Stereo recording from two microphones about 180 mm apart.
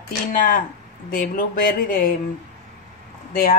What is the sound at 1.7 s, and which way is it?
Speech, 50° left (ahead or behind).